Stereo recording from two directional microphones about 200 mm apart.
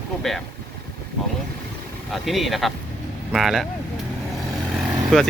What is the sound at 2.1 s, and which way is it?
Speech, centre (ahead or behind).